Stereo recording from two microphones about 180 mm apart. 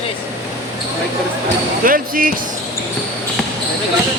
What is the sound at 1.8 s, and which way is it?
Speech, 50° right (ahead or behind).